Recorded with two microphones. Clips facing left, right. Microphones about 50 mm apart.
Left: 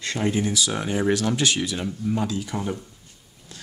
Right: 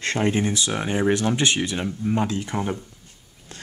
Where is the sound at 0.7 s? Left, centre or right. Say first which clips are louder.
Right 2 dB; right.